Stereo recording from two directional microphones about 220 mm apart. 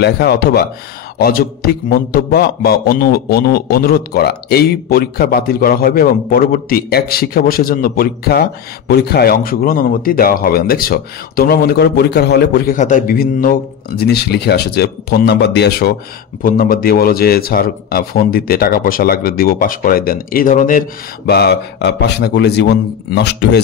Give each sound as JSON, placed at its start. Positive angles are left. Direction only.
{"t": 0.0, "sound": "a man's voice", "side_deg": 45}
{"t": 12.7, "sound": "a man's voice", "side_deg": 35}
{"t": 21.3, "sound": "a man's voice", "side_deg": 50}